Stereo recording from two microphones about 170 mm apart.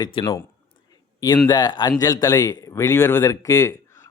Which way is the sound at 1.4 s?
25° left (ahead or behind).